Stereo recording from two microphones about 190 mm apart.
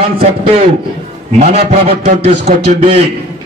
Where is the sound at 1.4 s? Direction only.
35° right (ahead or behind).